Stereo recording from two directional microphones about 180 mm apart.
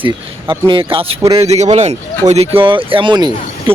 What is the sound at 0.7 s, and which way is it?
A man's voice, 30° right (ahead or behind).